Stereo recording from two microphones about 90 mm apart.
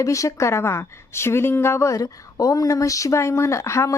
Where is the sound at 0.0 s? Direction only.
35° left (ahead or behind).